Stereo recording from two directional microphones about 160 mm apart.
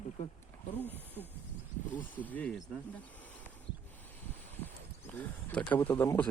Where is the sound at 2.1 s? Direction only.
10° left (ahead or behind).